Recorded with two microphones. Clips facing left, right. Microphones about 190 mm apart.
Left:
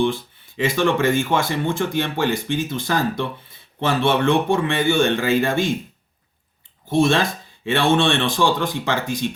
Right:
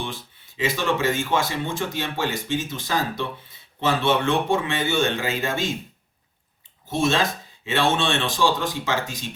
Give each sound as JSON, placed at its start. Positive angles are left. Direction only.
{"t": 0.0, "sound": "speech", "side_deg": 55}
{"t": 7.6, "sound": "speech", "side_deg": 55}